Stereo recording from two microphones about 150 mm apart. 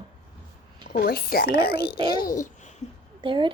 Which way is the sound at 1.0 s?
90° left.